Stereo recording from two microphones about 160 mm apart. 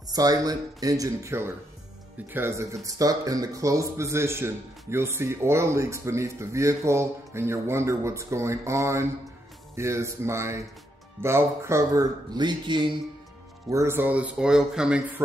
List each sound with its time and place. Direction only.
0.1 s speech: 25° right (ahead or behind)
13.7 s speech: 15° right (ahead or behind)